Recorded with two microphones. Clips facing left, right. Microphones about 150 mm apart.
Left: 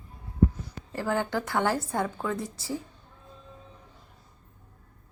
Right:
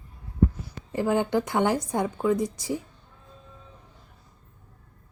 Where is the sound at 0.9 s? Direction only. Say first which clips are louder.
Right 5 dB; 20° right (ahead or behind).